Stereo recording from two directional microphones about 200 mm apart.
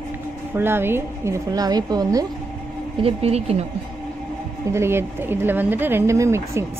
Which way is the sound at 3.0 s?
30° right (ahead or behind).